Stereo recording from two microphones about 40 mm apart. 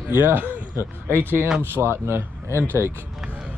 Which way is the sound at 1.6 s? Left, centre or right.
Right.